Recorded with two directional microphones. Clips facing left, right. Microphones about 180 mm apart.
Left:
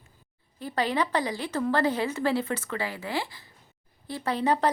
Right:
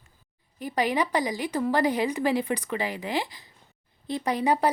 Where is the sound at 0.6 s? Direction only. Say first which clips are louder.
Right 2 dB; 15° right (ahead or behind).